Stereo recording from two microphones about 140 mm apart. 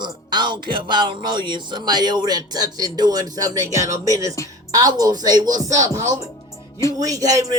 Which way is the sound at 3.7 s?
25° right (ahead or behind).